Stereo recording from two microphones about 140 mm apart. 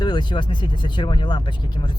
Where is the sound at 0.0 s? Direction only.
30° left (ahead or behind).